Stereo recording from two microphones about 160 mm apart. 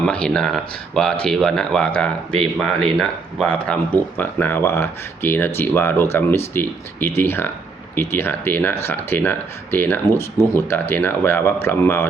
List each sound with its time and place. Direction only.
0.0 s speech: 5° left (ahead or behind)